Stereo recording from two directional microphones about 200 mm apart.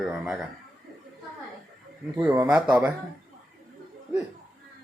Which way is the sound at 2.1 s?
10° right (ahead or behind).